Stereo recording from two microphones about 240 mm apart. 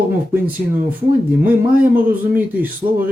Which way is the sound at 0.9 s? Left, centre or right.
Centre.